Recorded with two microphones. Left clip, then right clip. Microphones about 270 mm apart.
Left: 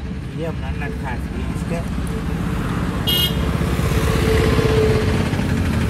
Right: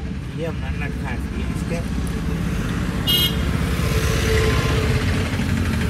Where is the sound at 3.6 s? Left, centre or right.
Left.